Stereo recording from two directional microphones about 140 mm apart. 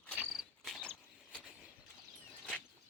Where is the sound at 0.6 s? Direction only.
Centre (ahead or behind).